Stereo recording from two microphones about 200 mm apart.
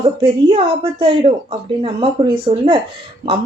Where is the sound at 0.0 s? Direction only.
25° right (ahead or behind).